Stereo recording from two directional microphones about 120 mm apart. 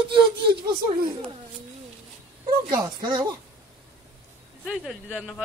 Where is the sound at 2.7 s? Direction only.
35° right (ahead or behind).